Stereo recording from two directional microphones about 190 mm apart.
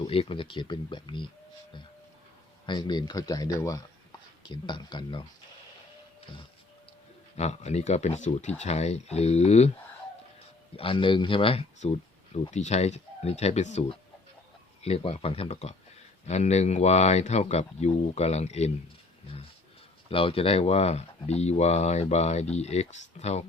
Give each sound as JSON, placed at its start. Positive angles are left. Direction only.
{"t": 0.0, "sound": "speech", "side_deg": 30}
{"t": 2.6, "sound": "speech", "side_deg": 25}
{"t": 7.3, "sound": "speech", "side_deg": 35}
{"t": 10.8, "sound": "speech", "side_deg": 25}
{"t": 20.1, "sound": "speech", "side_deg": 30}